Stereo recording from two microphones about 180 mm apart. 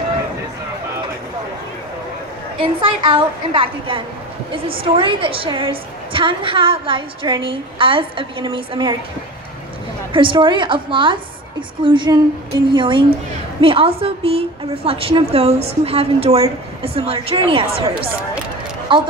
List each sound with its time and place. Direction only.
2.6 s a woman's voice: 30° right (ahead or behind)
10.1 s a woman's voice: 30° right (ahead or behind)
18.9 s a woman's voice: 25° right (ahead or behind)